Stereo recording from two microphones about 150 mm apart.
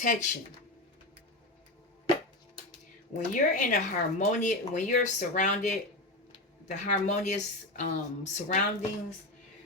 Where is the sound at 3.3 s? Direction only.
60° left (ahead or behind).